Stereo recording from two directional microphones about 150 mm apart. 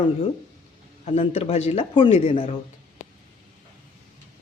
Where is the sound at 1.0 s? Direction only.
45° left (ahead or behind).